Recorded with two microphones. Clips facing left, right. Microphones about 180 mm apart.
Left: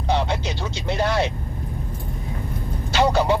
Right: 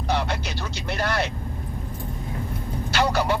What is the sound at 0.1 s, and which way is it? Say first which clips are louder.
Speech: left 3 dB; 20° left (ahead or behind).